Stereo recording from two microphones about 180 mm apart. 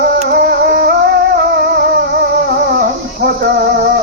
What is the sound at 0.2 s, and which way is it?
Music, 60° right (ahead or behind).